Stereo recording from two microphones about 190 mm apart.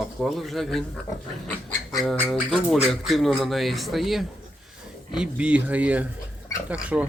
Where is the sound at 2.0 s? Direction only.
Centre (ahead or behind).